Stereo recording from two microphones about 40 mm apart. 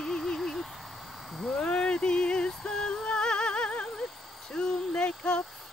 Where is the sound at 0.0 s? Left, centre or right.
Centre.